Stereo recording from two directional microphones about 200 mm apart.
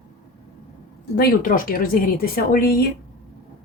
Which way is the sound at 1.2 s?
45° left (ahead or behind).